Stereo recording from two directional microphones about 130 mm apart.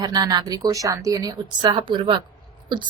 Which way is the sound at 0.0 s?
30° right (ahead or behind).